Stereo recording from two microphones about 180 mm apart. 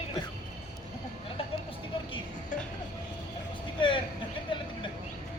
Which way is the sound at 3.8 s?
30° left (ahead or behind).